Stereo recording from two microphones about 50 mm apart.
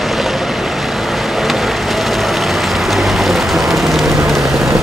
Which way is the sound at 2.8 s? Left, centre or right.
Centre.